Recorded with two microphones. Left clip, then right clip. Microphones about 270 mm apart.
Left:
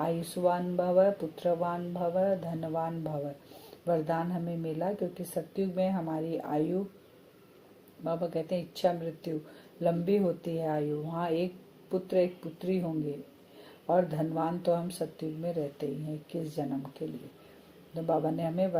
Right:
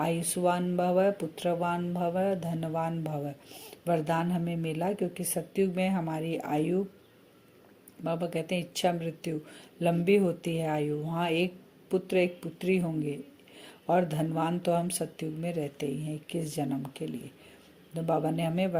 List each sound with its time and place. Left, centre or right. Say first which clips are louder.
0.0 s speech: right 1 dB; right
8.0 s speech: even; right